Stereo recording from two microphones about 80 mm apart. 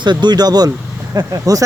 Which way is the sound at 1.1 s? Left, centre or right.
Right.